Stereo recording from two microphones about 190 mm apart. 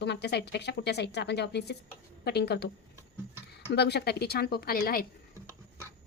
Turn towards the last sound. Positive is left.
turn(degrees=50)  # may be behind; listen again after turning